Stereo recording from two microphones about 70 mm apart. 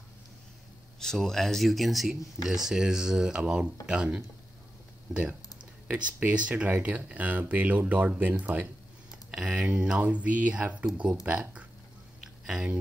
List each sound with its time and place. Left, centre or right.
0.9 s speech: centre
6.1 s speech: centre
9.3 s speech: centre
12.4 s speech: centre